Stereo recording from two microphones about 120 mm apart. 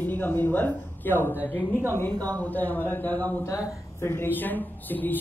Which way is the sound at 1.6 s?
15° right (ahead or behind).